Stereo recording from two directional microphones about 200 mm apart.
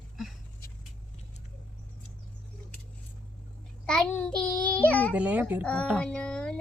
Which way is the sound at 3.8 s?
5° left (ahead or behind).